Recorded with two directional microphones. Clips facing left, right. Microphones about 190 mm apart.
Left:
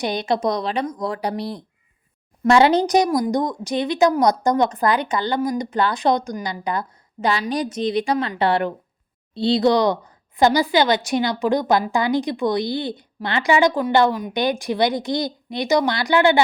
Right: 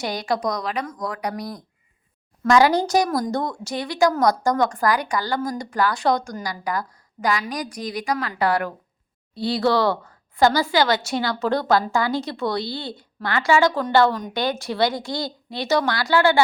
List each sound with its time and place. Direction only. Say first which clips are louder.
0.0 s a woman's voice: left 3 dB; 20° left (ahead or behind)